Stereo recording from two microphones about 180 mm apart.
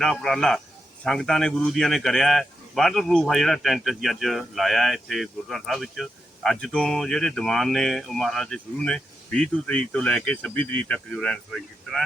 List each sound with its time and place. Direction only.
0.0 s a man's voice: centre (ahead or behind)